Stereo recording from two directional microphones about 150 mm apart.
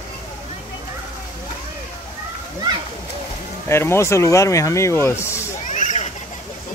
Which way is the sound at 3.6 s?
15° left (ahead or behind).